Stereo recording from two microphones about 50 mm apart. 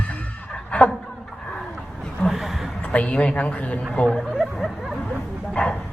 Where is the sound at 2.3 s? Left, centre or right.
Centre.